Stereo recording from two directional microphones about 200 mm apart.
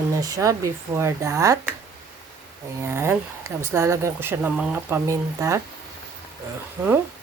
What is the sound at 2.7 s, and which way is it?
Speech, 15° right (ahead or behind).